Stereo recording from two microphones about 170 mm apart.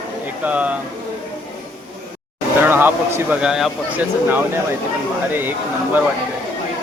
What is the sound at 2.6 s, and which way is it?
Speech, 10° right (ahead or behind).